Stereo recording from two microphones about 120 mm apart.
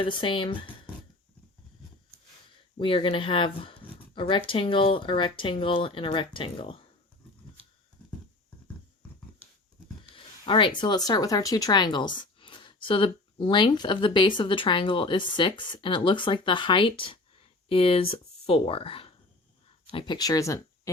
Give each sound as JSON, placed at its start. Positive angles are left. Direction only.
{"t": 0.0, "sound": "speech", "side_deg": 45}
{"t": 2.7, "sound": "speech", "side_deg": 45}
{"t": 10.2, "sound": "speech", "side_deg": 45}